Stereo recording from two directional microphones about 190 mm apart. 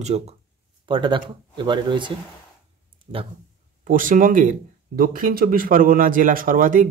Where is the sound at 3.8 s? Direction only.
45° right (ahead or behind).